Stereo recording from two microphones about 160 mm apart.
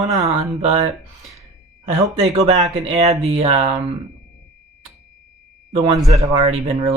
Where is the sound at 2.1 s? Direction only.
45° right (ahead or behind).